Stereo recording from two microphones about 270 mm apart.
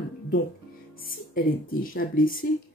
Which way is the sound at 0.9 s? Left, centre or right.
Left.